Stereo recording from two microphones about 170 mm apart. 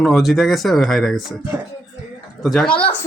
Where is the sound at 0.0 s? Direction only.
Centre (ahead or behind).